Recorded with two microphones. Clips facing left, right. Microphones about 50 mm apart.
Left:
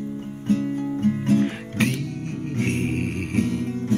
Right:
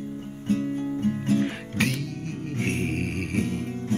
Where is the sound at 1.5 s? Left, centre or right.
Centre.